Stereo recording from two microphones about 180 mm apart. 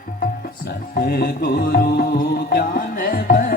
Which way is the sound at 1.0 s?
55° left (ahead or behind).